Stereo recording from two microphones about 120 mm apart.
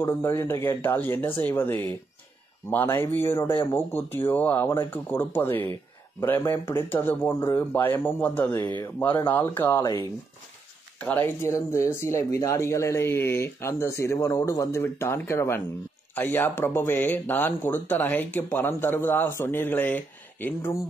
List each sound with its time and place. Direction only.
0.0 s speech: 20° left (ahead or behind)
11.0 s speech: 15° left (ahead or behind)